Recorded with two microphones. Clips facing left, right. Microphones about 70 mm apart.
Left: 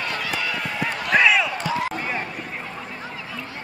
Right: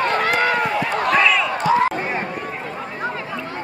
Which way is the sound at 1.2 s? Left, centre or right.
Centre.